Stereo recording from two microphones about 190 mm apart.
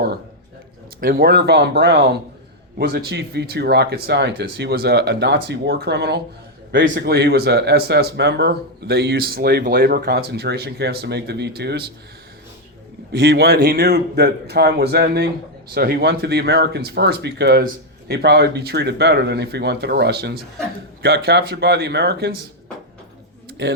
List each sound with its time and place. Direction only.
1.0 s a man's voice: 55° right (ahead or behind); by 6.9 s 70° right (ahead or behind)
6.9 s speech: 55° right (ahead or behind)
13.1 s speech: 60° right (ahead or behind)
23.5 s a sound: 60° right (ahead or behind)